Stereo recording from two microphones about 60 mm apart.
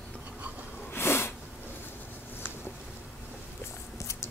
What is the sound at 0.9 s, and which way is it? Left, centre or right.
Sneeze, left.